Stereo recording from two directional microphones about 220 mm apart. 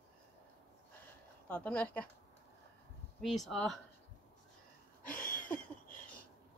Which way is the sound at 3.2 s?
Centre (ahead or behind).